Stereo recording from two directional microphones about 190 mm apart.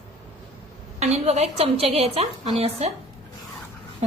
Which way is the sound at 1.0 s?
35° right (ahead or behind).